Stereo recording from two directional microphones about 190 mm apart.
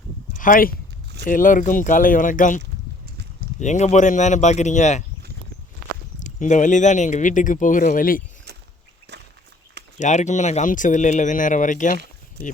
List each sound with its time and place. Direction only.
0.3 s speech: 45° left (ahead or behind)
3.6 s speech: 40° left (ahead or behind)
6.1 s speech: 40° left (ahead or behind)
10.0 s speech: 40° left (ahead or behind)